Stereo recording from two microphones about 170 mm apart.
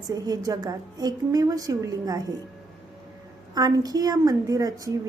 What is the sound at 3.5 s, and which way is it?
A woman's voice, 20° right (ahead or behind).